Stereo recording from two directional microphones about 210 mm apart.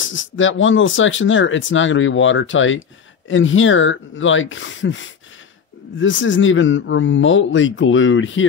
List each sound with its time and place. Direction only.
0.0 s speech: 65° left (ahead or behind)